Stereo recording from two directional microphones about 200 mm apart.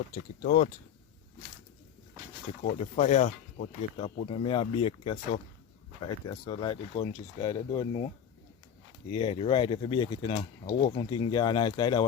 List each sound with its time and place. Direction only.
0.4 s speech: 45° left (ahead or behind)
2.6 s speech: 40° left (ahead or behind); by 12.0 s 20° left (ahead or behind)